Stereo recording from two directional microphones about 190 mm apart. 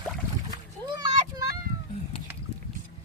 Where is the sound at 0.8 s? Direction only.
20° right (ahead or behind).